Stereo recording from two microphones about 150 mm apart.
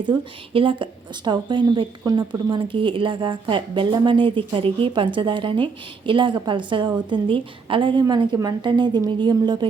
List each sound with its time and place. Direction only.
0.0 s a woman's voice: 35° right (ahead or behind)